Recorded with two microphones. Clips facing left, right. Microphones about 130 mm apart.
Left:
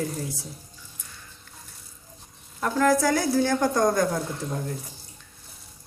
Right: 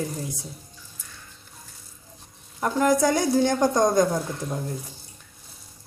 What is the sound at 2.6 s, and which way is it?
A woman's voice, 20° right (ahead or behind).